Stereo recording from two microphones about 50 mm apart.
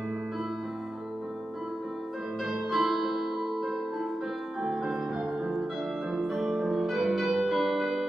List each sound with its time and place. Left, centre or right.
2.4 s music: centre
5.4 s music: centre